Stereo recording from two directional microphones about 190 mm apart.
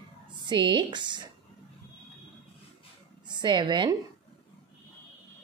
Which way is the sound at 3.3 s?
25° right (ahead or behind).